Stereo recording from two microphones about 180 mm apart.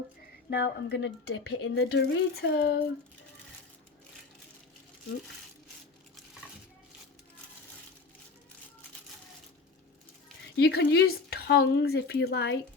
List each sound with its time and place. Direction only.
0.5 s speech: 80° left; by 2.8 s 65° left (ahead or behind)
10.6 s speech: 65° left (ahead or behind)